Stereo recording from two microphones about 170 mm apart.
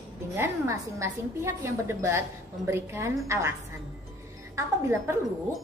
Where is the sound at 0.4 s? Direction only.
15° right (ahead or behind).